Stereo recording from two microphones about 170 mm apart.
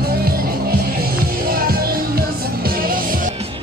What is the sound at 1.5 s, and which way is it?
Music, 60° right (ahead or behind).